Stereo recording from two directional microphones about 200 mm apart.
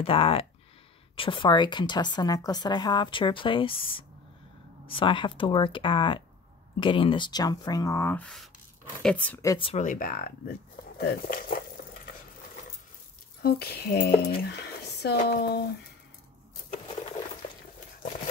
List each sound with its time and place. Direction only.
0.0 s a woman's voice: 30° left (ahead or behind)
9.7 s speech: 40° left (ahead or behind)
13.4 s speech: 50° left (ahead or behind)